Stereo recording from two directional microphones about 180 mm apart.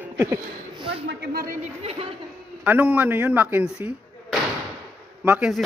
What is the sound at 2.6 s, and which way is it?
Speech, 10° right (ahead or behind).